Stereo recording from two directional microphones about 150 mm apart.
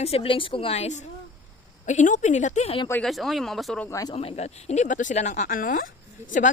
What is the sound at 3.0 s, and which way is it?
Speech, centre (ahead or behind).